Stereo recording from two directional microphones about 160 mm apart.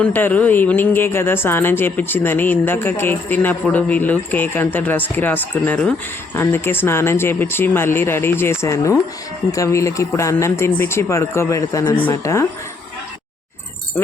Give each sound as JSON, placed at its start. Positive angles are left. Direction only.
{"t": 0.0, "sound": "speech", "side_deg": 10}